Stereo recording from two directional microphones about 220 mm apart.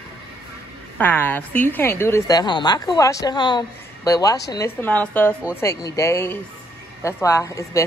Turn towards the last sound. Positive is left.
turn(degrees=15)  # may be behind; listen again after turning